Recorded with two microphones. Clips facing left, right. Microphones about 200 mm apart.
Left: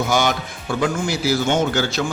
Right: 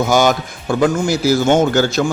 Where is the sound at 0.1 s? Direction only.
45° right (ahead or behind).